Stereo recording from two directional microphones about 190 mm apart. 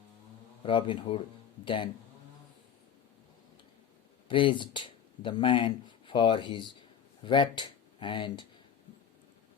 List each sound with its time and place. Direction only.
0.6 s speech: 25° left (ahead or behind)
4.3 s speech: 25° left (ahead or behind)